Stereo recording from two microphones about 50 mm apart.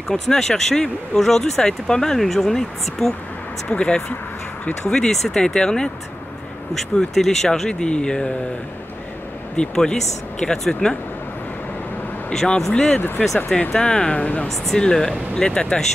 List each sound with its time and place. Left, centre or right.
0.1 s speech: centre
3.6 s speech: left
9.6 s speech: centre
12.3 s speech: centre
14.7 s speech: centre